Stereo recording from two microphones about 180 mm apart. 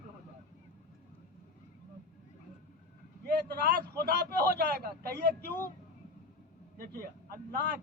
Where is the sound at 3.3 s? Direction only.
60° right (ahead or behind).